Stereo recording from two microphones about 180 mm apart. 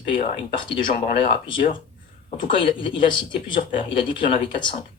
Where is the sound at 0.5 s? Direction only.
25° left (ahead or behind).